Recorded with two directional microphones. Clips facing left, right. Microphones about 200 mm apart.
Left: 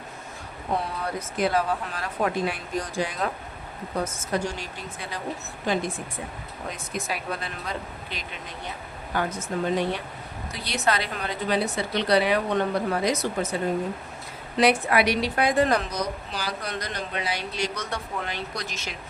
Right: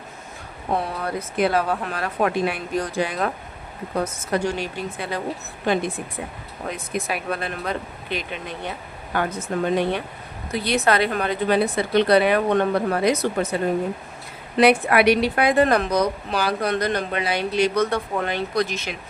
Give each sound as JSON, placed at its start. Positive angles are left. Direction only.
{"t": 1.4, "sound": "a woman's voice", "side_deg": -60}
{"t": 14.6, "sound": "a woman's voice", "side_deg": -60}